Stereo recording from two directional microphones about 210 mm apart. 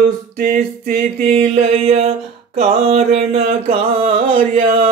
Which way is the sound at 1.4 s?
30° right (ahead or behind).